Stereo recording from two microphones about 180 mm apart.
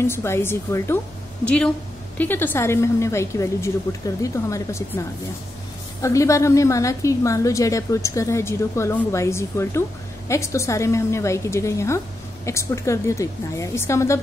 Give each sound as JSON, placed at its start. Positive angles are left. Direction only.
{"t": 0.0, "sound": "a woman's voice", "side_deg": 15}